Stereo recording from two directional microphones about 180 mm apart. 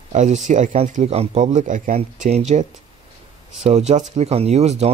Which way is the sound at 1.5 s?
45° right (ahead or behind).